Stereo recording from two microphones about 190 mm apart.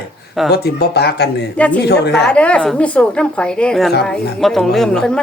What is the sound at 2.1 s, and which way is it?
Speech, 5° left (ahead or behind).